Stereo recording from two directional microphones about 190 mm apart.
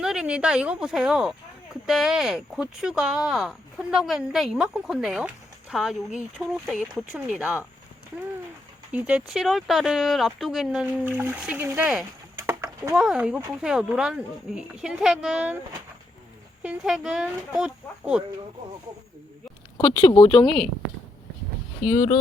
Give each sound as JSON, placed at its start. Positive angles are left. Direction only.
{"t": 0.0, "sound": "speech", "side_deg": -5}
{"t": 8.9, "sound": "speech", "side_deg": -5}
{"t": 12.5, "sound": "a sound", "side_deg": -15}
{"t": 12.9, "sound": "speech", "side_deg": -5}
{"t": 16.6, "sound": "speech", "side_deg": -5}
{"t": 19.7, "sound": "speech", "side_deg": 25}
{"t": 21.8, "sound": "speech", "side_deg": 25}